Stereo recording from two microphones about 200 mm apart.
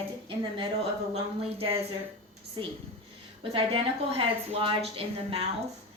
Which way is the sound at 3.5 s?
30° right (ahead or behind).